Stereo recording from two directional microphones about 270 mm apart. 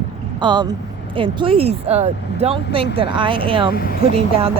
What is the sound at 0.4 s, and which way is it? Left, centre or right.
Speech, centre.